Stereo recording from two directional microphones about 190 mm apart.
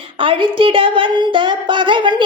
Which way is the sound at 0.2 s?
25° right (ahead or behind).